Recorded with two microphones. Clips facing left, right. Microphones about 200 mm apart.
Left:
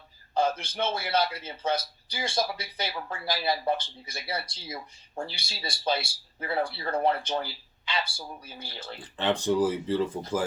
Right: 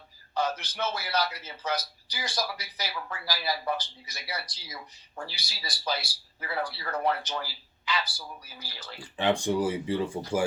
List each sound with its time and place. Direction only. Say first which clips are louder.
0.3 s a man's voice: left 3 dB; 30° left (ahead or behind)
9.1 s speech: left 1 dB; 10° right (ahead or behind)